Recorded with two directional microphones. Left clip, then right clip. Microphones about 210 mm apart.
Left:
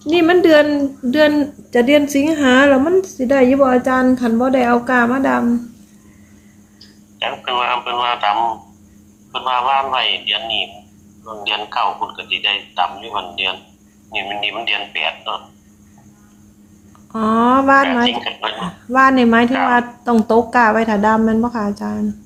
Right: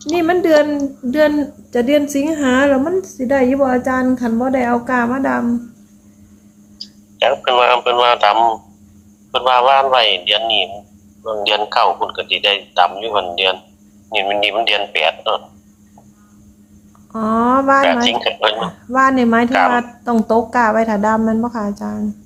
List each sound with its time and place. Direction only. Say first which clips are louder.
0.2 s a woman's voice: left 2 dB; 10° left (ahead or behind)
6.7 s a man's voice: right 7 dB; 50° right (ahead or behind)
17.1 s a woman's voice: left 1 dB; 10° left (ahead or behind)
17.8 s speech: right 3 dB; 50° right (ahead or behind)
18.9 s a woman's voice: left 2 dB; 5° left (ahead or behind)